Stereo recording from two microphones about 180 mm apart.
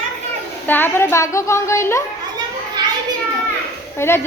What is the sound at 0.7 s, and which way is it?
A woman's voice, 10° left (ahead or behind).